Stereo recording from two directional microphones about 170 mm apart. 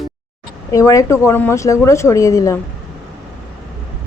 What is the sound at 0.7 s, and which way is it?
Speech, 20° left (ahead or behind).